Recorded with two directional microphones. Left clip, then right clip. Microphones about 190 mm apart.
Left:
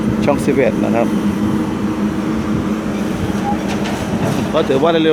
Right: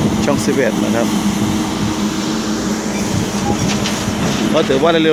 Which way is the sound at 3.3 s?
50° left (ahead or behind).